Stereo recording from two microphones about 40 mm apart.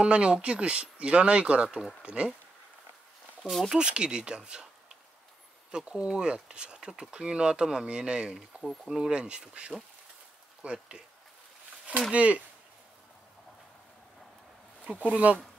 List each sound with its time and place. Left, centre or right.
0.0 s speech: right
3.4 s speech: centre
3.7 s speech: right
5.7 s speech: right
8.4 s speech: centre
9.1 s speech: right
12.1 s speech: right
15.0 s speech: right